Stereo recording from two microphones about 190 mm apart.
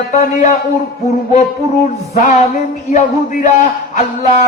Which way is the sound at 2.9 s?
40° left (ahead or behind).